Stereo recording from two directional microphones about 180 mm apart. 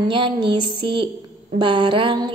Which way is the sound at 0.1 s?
30° right (ahead or behind).